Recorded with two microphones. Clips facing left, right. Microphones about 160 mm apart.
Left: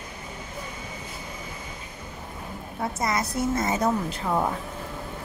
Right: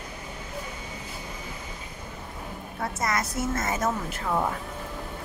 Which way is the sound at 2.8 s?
20° left (ahead or behind).